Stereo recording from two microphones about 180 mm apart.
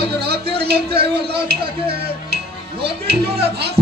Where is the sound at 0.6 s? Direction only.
60° right (ahead or behind).